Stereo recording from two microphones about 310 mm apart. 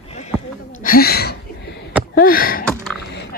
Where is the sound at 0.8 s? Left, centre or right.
Left.